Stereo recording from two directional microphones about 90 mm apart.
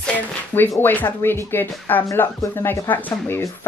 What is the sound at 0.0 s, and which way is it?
Speech, 20° left (ahead or behind).